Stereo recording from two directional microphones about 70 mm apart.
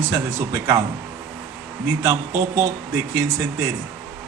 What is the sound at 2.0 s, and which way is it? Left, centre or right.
Speech, right.